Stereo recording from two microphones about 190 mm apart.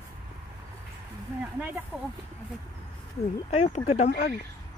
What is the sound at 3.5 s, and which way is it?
Speech, 35° left (ahead or behind).